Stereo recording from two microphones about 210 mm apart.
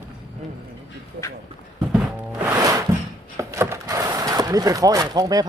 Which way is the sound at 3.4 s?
15° right (ahead or behind).